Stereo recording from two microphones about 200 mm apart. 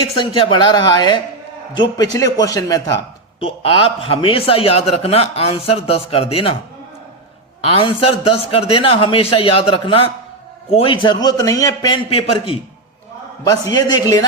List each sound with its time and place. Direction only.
0.3 s a man's voice: 20° left (ahead or behind)
7.6 s a man's voice: 30° left (ahead or behind)